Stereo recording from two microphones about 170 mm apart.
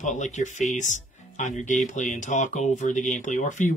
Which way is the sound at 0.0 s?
45° left (ahead or behind).